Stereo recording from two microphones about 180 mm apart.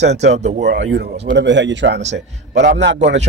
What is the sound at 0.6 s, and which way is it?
Speech, 75° right (ahead or behind).